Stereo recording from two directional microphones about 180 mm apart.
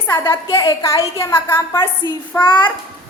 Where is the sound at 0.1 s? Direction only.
15° left (ahead or behind).